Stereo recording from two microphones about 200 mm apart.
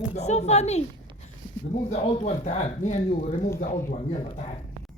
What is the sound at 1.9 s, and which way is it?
Speech, 35° left (ahead or behind).